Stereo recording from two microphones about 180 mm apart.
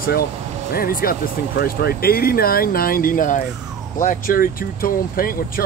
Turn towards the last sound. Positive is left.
turn(degrees=55)  # may be behind; listen again after turning